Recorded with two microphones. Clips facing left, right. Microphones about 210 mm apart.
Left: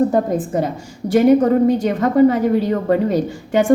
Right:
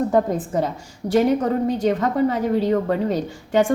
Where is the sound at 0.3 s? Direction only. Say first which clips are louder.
Left 3 dB; 55° left (ahead or behind).